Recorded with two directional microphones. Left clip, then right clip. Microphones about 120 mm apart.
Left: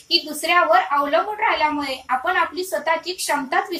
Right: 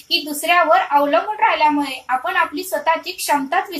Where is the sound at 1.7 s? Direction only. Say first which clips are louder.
Right 3 dB; 25° right (ahead or behind).